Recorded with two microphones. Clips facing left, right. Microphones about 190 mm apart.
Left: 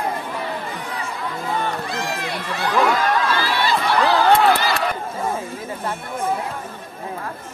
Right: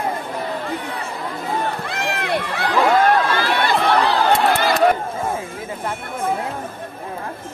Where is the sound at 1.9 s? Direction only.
60° right (ahead or behind).